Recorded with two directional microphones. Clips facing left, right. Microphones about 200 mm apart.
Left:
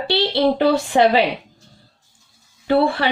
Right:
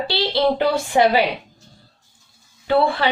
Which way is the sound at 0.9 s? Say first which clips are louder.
Even; 40° left (ahead or behind).